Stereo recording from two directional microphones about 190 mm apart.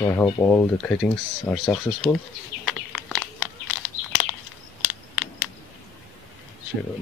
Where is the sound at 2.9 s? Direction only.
Centre (ahead or behind).